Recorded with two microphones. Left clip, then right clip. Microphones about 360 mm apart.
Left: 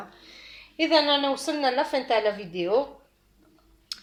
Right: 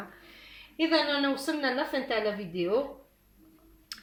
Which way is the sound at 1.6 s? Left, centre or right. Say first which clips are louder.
Left 8 dB; left.